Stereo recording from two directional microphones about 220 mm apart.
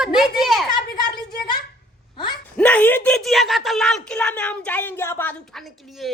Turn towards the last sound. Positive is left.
turn(degrees=0)  # may be behind; listen again after turning